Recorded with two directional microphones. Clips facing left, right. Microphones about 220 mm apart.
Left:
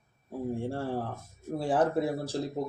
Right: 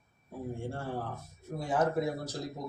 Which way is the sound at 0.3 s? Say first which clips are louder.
Left 6 dB; 30° left (ahead or behind).